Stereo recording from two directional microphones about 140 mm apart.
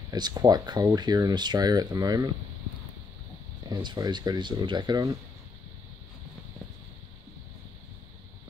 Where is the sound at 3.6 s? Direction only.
30° right (ahead or behind).